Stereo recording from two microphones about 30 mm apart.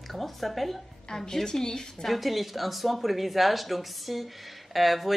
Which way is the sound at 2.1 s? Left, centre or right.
Centre.